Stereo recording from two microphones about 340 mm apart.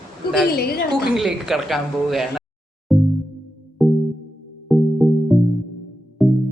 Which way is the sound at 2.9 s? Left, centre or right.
Centre.